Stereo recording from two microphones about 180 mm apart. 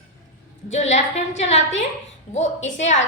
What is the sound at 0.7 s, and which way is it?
Speech, 40° left (ahead or behind).